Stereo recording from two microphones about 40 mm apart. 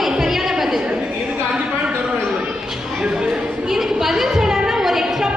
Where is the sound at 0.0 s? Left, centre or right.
Centre.